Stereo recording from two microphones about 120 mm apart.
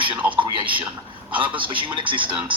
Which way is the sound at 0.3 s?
45° right (ahead or behind).